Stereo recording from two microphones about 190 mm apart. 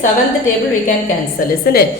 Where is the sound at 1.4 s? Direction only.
45° left (ahead or behind).